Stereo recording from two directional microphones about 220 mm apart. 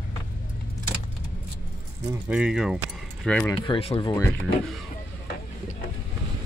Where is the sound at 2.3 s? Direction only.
5° right (ahead or behind).